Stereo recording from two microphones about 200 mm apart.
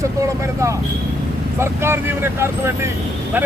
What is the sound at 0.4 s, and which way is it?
Speech, 15° right (ahead or behind).